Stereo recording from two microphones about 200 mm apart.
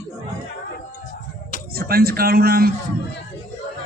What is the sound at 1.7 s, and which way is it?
A man's voice, 50° right (ahead or behind).